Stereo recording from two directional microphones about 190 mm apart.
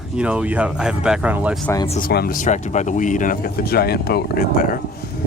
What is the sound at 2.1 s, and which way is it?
Speech, 55° left (ahead or behind).